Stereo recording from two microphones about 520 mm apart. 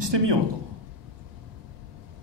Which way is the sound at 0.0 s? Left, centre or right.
Right.